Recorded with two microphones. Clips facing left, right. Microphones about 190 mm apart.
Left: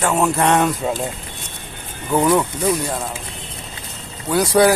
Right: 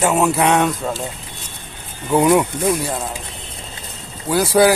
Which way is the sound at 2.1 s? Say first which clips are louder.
Right 2 dB; 10° right (ahead or behind).